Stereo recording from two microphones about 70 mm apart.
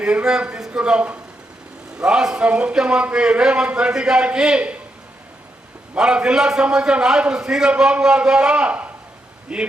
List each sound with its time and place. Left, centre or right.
0.0 s a man's voice: centre
6.0 s a man's voice: centre